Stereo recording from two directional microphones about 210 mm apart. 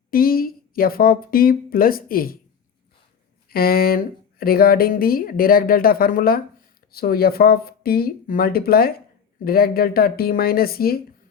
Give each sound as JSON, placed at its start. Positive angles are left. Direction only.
{"t": 0.1, "sound": "speech", "side_deg": 45}
{"t": 3.5, "sound": "speech", "side_deg": 45}